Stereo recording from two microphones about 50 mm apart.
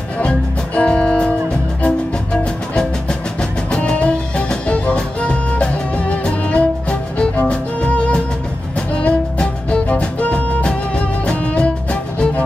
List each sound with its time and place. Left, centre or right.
0.2 s music: left